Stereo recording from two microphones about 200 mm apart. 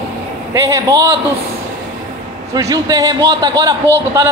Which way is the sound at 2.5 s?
20° right (ahead or behind).